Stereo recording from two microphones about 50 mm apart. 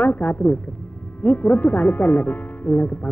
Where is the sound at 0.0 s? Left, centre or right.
Left.